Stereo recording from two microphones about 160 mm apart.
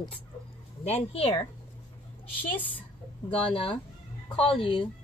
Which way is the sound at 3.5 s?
35° left (ahead or behind).